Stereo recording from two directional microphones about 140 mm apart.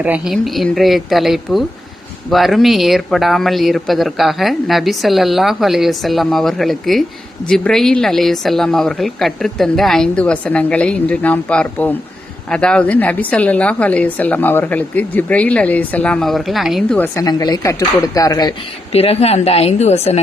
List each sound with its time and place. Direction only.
0.0 s a woman's voice: 5° right (ahead or behind)
17.0 s speech: 25° left (ahead or behind)
18.9 s a woman's voice: 45° left (ahead or behind)